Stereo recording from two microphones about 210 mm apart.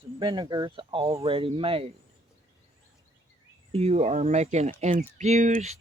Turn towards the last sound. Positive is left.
turn(degrees=-35)  # may be behind; listen again after turning